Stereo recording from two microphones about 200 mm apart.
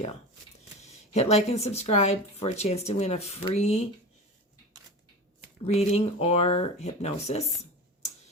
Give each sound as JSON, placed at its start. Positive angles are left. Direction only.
{"t": 1.1, "sound": "speech", "side_deg": 35}
{"t": 5.6, "sound": "speech", "side_deg": 30}